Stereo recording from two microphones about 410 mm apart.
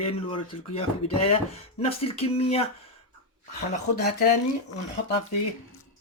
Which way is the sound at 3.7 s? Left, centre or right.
Left.